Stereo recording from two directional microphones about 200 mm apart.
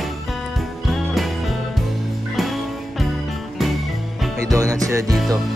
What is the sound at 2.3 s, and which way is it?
Music, centre (ahead or behind).